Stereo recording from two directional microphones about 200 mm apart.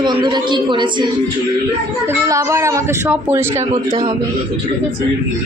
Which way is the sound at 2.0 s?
15° right (ahead or behind).